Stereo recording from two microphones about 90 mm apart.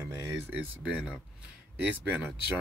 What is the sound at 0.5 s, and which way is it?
Speech, 20° right (ahead or behind).